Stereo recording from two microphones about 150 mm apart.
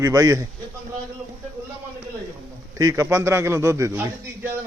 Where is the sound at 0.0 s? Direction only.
20° right (ahead or behind).